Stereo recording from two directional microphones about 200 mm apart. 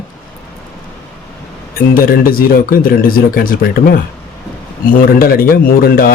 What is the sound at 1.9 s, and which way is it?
A man's voice, 45° left (ahead or behind).